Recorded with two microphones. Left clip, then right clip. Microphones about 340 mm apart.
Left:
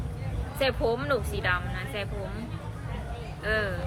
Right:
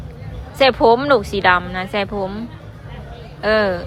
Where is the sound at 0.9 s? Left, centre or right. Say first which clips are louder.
Right 13 dB; centre.